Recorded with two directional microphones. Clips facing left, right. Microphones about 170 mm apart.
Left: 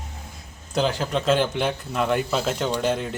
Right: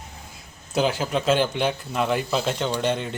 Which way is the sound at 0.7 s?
5° right (ahead or behind).